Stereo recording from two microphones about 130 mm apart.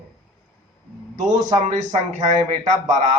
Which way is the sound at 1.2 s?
70° right (ahead or behind).